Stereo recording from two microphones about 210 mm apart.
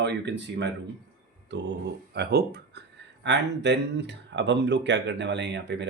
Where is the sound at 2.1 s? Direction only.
50° right (ahead or behind).